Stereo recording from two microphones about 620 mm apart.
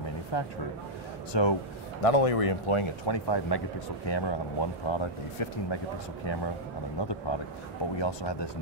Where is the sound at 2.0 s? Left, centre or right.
Left.